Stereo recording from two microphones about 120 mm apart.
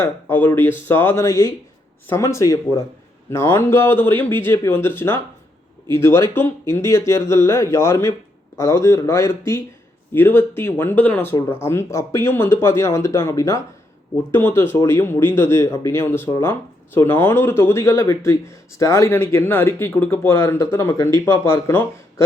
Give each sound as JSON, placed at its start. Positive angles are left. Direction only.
{"t": 0.0, "sound": "speech", "side_deg": 15}